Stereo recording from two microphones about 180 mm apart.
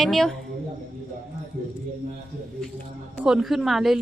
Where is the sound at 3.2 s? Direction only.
Centre (ahead or behind).